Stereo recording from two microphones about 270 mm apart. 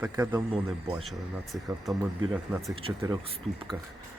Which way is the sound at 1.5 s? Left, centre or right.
Centre.